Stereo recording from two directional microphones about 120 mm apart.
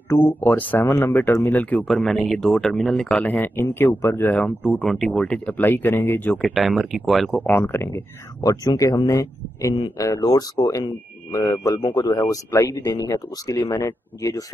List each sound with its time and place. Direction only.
0.1 s speech: 15° left (ahead or behind)
6.3 s speech: centre (ahead or behind)
7.2 s speech: 15° left (ahead or behind)